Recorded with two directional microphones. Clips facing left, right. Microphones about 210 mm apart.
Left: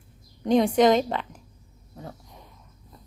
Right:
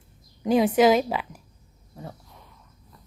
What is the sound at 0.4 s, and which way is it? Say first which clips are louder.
Speech: even; 5° right (ahead or behind).